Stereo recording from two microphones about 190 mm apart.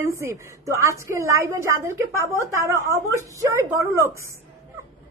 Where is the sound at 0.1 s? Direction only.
15° right (ahead or behind).